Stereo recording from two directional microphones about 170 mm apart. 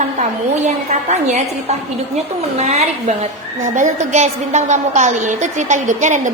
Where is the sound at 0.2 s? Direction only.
40° right (ahead or behind).